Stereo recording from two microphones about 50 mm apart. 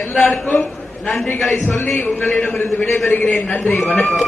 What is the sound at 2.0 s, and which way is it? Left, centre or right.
A man's voice, left.